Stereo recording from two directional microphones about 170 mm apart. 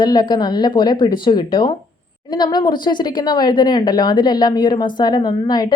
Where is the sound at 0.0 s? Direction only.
25° left (ahead or behind).